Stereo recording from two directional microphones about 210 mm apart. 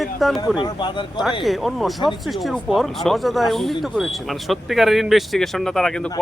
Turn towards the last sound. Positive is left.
turn(degrees=5)  # may be behind; listen again after turning